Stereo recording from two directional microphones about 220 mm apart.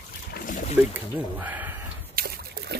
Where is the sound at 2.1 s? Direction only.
45° right (ahead or behind).